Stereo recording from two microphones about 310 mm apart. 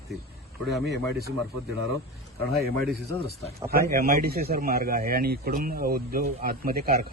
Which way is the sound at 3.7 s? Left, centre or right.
Right.